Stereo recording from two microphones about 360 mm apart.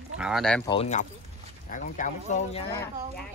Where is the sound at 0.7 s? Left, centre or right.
Centre.